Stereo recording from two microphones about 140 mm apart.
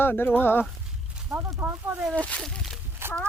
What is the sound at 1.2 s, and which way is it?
Speech, 10° right (ahead or behind).